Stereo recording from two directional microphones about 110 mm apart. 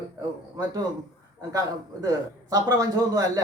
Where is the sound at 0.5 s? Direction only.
35° right (ahead or behind).